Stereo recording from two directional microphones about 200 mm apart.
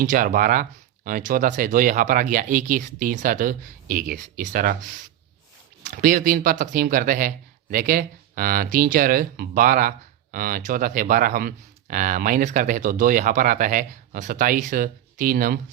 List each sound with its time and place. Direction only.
0.0 s speech: 40° right (ahead or behind)